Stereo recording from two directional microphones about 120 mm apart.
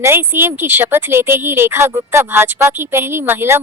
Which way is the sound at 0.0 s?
20° right (ahead or behind).